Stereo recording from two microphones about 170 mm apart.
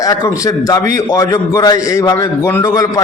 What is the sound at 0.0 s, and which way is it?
A man's voice, 20° left (ahead or behind).